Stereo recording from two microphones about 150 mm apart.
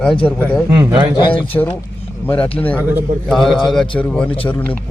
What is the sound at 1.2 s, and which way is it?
Speech, 30° left (ahead or behind).